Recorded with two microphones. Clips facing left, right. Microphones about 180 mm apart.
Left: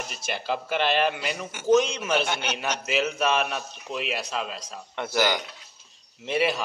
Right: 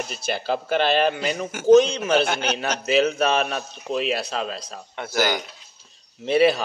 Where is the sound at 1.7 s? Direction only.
30° right (ahead or behind).